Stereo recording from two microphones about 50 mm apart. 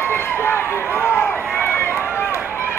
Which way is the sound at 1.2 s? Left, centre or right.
Left.